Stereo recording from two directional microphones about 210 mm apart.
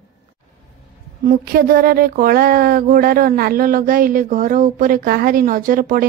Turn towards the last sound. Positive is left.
turn(degrees=-40)  # may be behind; listen again after turning